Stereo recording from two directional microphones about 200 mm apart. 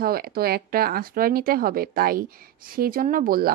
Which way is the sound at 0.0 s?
50° right (ahead or behind).